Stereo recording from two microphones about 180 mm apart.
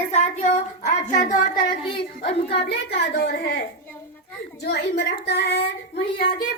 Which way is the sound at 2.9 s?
65° left (ahead or behind).